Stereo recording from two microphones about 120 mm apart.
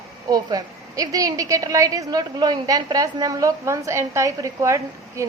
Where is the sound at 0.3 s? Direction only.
30° right (ahead or behind).